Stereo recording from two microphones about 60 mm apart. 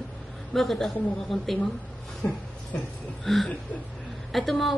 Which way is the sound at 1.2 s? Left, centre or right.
Centre.